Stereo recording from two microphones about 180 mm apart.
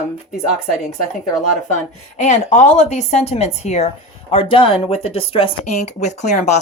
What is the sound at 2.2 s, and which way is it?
A woman's voice, 40° left (ahead or behind).